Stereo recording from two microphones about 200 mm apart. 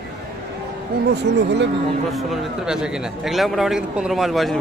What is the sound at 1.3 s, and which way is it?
Speech, 60° right (ahead or behind).